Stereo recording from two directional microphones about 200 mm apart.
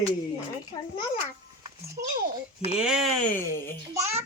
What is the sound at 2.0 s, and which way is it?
Speech, 50° right (ahead or behind).